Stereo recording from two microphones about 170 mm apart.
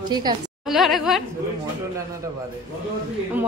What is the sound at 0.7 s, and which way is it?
Speech, centre (ahead or behind).